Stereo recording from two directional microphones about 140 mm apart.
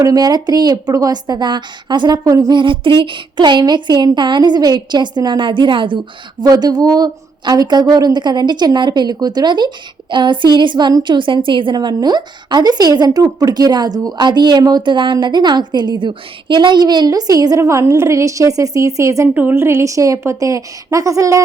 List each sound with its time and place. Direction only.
0.0 s a woman's voice: 30° right (ahead or behind)